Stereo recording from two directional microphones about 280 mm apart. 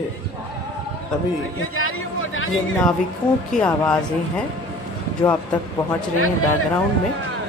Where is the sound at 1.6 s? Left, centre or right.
Left.